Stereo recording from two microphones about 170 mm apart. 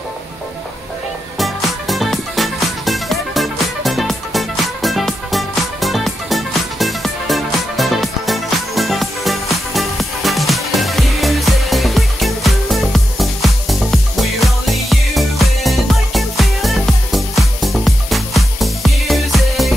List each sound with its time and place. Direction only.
1.4 s music: centre (ahead or behind)